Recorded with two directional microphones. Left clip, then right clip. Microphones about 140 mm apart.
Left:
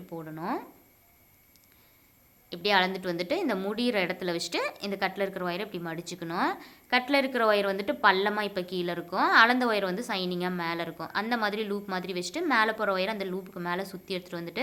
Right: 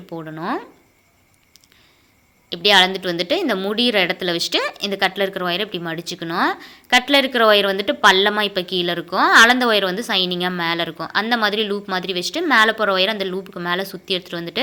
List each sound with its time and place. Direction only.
0.1 s a woman's voice: 25° right (ahead or behind)
2.5 s a woman's voice: 20° right (ahead or behind)